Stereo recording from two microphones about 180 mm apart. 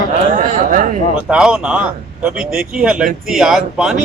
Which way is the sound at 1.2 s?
5° right (ahead or behind).